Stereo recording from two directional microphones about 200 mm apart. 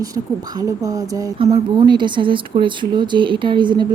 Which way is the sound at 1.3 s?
30° right (ahead or behind).